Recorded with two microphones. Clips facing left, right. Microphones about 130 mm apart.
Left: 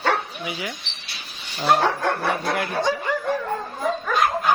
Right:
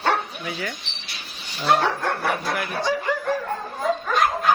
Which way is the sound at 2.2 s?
25° left (ahead or behind).